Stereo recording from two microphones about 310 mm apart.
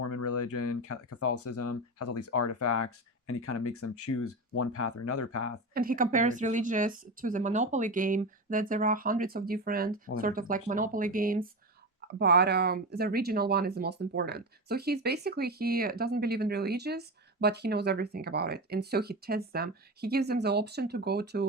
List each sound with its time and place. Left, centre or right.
0.0 s speech: left
5.7 s speech: right